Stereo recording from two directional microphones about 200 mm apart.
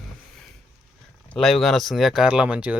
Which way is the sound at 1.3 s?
Centre (ahead or behind).